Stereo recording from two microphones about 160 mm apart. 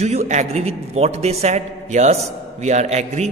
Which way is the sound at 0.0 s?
45° right (ahead or behind).